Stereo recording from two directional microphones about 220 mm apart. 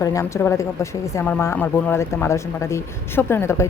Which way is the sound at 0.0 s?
15° left (ahead or behind).